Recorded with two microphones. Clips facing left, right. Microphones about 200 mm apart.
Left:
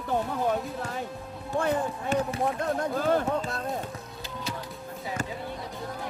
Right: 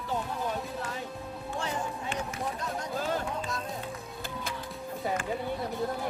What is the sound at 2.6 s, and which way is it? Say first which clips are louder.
Speech: left 6 dB; 55° left (ahead or behind).